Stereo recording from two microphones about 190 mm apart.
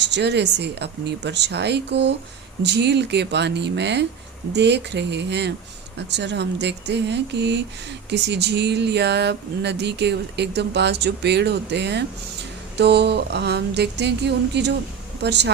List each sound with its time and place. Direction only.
0.0 s speech: 65° right (ahead or behind)